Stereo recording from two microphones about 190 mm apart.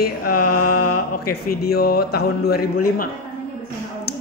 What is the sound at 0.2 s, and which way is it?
Speech, 50° left (ahead or behind).